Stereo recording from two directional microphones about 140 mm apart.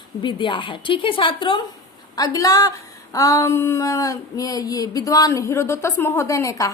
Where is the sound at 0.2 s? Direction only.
35° left (ahead or behind).